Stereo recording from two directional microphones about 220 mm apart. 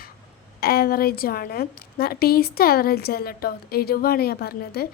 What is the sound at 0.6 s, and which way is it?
A woman's voice, 45° left (ahead or behind).